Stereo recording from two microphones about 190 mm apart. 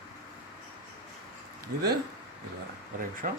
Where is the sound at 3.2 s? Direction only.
40° right (ahead or behind).